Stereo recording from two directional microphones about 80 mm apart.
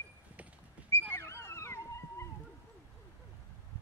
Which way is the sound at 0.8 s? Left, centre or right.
Left.